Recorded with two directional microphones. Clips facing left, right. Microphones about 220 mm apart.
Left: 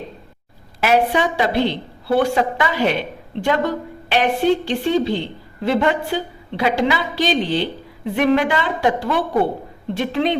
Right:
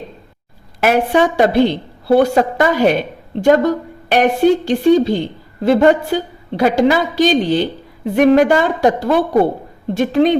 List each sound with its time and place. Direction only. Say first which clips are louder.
0.8 s a woman's voice: right 4 dB; 50° right (ahead or behind)